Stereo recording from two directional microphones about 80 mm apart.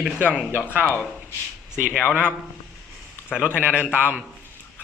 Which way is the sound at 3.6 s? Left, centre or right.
Centre.